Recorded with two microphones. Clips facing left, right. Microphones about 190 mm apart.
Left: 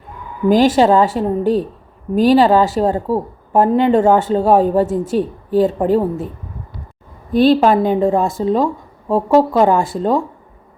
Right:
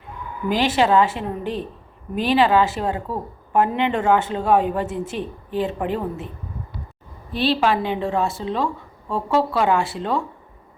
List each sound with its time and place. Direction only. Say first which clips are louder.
0.4 s speech: left 8 dB; 45° left (ahead or behind)
7.3 s speech: left 9 dB; 45° left (ahead or behind)